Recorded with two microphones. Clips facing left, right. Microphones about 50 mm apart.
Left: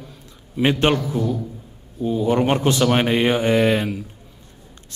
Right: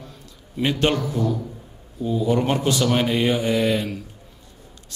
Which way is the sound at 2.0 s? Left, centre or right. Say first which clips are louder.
Left 2 dB; left.